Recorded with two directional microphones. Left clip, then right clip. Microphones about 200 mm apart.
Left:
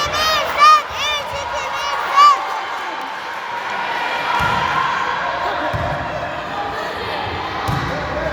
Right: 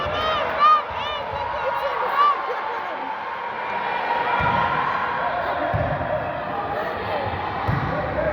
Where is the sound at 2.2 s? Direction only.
65° left (ahead or behind).